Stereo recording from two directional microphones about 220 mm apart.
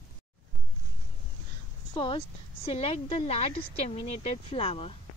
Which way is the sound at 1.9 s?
20° left (ahead or behind).